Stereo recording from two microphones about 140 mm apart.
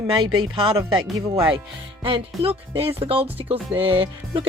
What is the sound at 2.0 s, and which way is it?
Speech, 40° right (ahead or behind).